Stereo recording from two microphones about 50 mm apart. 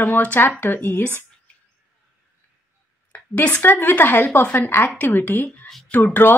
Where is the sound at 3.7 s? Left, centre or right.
Left.